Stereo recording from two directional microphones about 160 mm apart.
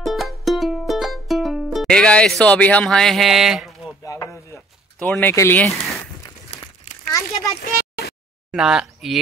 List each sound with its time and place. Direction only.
0.0 s music: centre (ahead or behind)
4.0 s a sound: 20° left (ahead or behind)
4.9 s speech: 10° left (ahead or behind)
6.5 s crumpling: 35° left (ahead or behind)
7.1 s a sound: 20° left (ahead or behind)
8.5 s speech: 5° right (ahead or behind)